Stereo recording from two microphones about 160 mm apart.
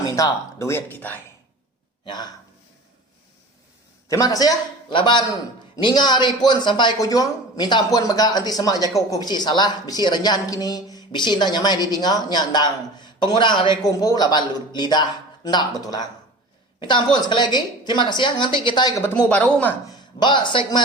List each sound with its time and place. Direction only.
0.0 s speech: 20° left (ahead or behind)
2.0 s speech: 25° left (ahead or behind)
4.1 s speech: 20° left (ahead or behind)
19.0 s speech: 10° left (ahead or behind)
20.1 s speech: 30° left (ahead or behind)